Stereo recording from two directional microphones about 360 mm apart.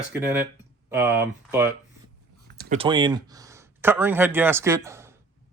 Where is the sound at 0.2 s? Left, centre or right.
Centre.